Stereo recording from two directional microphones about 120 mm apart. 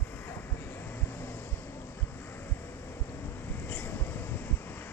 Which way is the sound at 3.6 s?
15° left (ahead or behind).